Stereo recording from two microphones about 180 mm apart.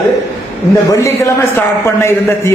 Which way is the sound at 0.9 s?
15° left (ahead or behind).